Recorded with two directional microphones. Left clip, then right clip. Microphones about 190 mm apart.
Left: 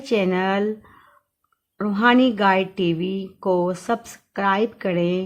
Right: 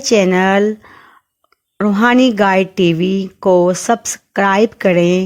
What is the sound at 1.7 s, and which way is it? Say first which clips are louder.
Speech: right 5 dB; 35° right (ahead or behind).